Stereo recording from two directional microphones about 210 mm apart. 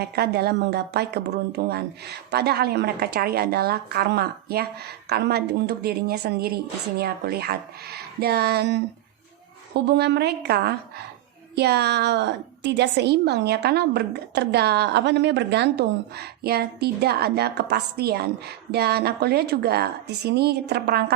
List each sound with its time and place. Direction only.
0.2 s a woman's voice: 50° right (ahead or behind)